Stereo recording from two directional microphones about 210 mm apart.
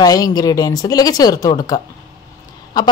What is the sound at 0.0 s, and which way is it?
A woman's voice, 15° left (ahead or behind).